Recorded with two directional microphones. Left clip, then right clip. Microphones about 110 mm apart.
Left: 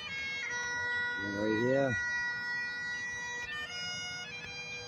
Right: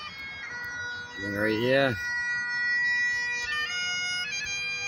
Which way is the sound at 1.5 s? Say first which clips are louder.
Right 5 dB; 5° right (ahead or behind).